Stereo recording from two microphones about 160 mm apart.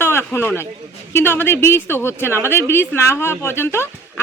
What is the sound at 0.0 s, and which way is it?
Speech, 15° left (ahead or behind).